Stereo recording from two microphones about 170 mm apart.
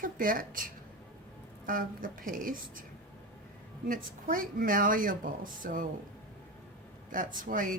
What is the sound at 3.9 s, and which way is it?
Speech, 55° right (ahead or behind).